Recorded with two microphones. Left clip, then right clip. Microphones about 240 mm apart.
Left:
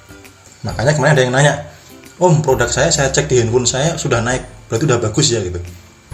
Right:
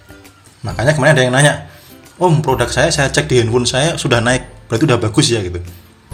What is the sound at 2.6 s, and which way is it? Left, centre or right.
Speech, right.